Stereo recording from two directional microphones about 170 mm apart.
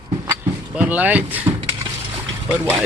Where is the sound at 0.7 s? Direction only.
10° right (ahead or behind).